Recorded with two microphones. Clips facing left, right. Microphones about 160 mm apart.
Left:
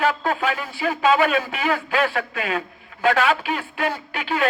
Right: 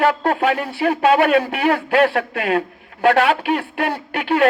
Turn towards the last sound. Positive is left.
turn(degrees=-65)  # may be behind; listen again after turning